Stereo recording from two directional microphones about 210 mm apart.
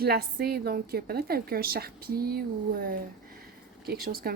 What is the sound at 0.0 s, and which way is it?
A woman's voice, 50° right (ahead or behind).